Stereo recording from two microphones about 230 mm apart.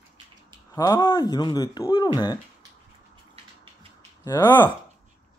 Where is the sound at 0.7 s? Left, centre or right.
Centre.